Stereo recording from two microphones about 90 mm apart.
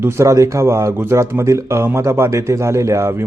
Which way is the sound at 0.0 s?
30° right (ahead or behind).